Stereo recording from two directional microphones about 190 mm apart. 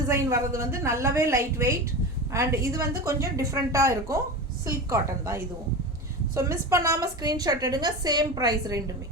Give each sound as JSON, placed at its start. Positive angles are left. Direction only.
{"t": 0.1, "sound": "a woman's voice", "side_deg": -15}